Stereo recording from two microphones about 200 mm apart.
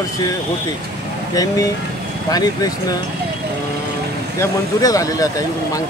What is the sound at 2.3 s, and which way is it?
Speech, 20° left (ahead or behind).